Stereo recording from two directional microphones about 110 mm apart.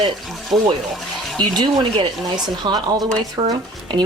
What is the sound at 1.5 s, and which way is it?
Speech, 45° right (ahead or behind).